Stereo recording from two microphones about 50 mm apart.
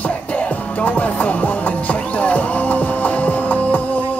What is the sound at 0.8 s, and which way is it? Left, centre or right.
Music, left.